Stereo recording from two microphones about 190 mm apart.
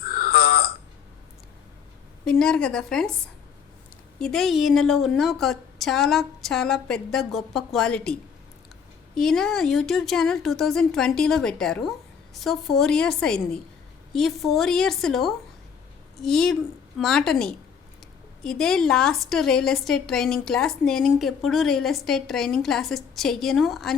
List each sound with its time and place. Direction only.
0.0 s burping: 50° left (ahead or behind)
2.2 s a woman's voice: 5° left (ahead or behind)
4.2 s a woman's voice: centre (ahead or behind)
9.1 s a woman's voice: centre (ahead or behind)